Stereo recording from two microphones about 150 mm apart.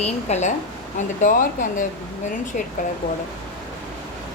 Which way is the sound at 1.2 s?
60° left (ahead or behind).